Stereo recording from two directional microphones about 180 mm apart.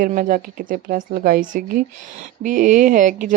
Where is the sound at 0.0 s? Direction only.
45° right (ahead or behind).